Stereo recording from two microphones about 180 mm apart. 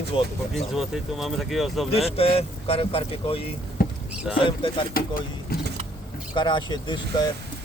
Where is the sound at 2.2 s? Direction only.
35° left (ahead or behind).